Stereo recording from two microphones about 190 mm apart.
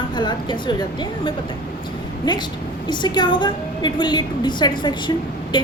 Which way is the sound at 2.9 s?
25° left (ahead or behind).